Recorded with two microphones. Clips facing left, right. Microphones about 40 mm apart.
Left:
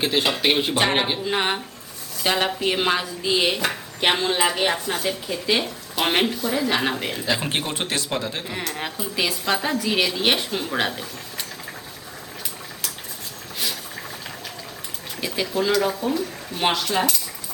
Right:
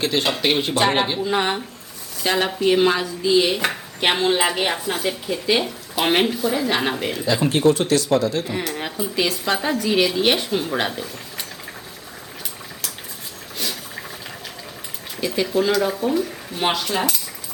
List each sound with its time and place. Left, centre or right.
0.0 s speech: centre
3.2 s dishes: centre
3.6 s speech: centre
7.5 s speech: left
8.4 s speech: centre
13.6 s a sound: centre
15.2 s speech: centre